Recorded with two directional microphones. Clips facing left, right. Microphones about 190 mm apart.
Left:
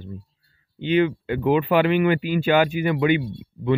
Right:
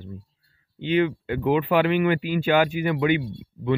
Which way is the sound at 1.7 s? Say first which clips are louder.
Left 1 dB; 5° left (ahead or behind).